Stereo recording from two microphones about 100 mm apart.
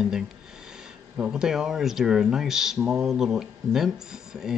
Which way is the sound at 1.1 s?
15° right (ahead or behind).